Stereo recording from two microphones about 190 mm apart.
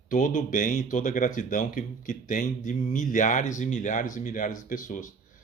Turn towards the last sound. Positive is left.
turn(degrees=45)  # may be behind; listen again after turning